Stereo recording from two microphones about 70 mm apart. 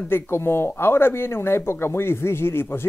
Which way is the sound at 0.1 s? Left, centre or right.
Left.